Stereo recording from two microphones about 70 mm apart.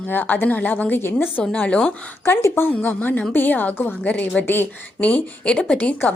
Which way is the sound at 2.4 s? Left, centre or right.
Left.